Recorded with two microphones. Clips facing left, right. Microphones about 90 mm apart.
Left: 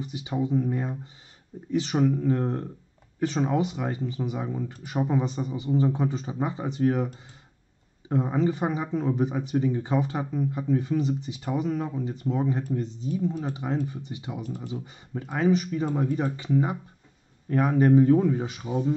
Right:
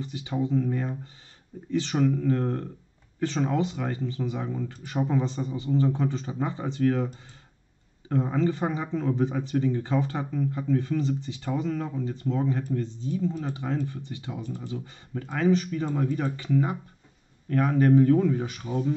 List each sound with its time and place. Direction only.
0.0 s speech: 15° left (ahead or behind)
8.1 s speech: 15° left (ahead or behind)